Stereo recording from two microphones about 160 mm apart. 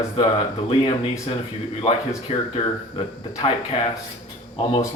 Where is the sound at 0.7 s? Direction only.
35° left (ahead or behind).